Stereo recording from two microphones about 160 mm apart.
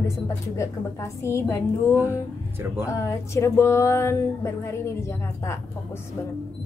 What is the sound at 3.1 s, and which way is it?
Speech, 15° left (ahead or behind).